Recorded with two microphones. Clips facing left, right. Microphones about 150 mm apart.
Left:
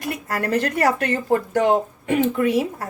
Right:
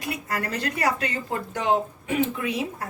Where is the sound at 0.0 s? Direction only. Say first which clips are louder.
Left 4 dB; 50° left (ahead or behind).